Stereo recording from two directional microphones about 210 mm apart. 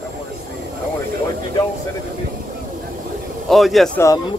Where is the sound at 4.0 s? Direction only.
15° left (ahead or behind).